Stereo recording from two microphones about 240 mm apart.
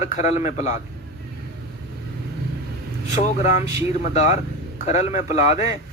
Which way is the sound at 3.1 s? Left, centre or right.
Left.